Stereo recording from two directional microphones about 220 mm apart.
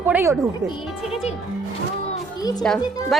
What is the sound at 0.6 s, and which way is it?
Speech, 25° left (ahead or behind).